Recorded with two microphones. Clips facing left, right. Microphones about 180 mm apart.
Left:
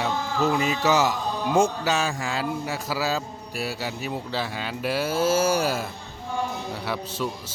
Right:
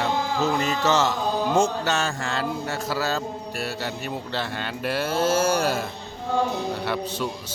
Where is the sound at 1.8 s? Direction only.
Centre (ahead or behind).